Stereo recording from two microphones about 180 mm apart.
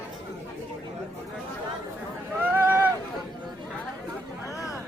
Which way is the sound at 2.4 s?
10° right (ahead or behind).